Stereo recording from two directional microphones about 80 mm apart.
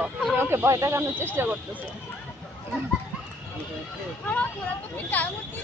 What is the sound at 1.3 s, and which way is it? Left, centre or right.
Speech, right.